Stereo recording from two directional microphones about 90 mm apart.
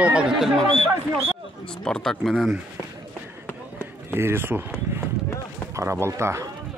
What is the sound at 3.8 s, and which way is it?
Run, 25° right (ahead or behind).